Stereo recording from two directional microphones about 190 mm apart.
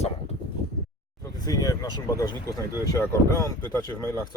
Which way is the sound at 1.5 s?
20° left (ahead or behind).